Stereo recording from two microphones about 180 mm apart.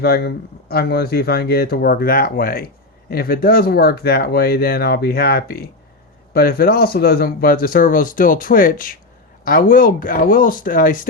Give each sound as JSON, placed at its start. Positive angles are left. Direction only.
{"t": 0.0, "sound": "speech", "side_deg": 60}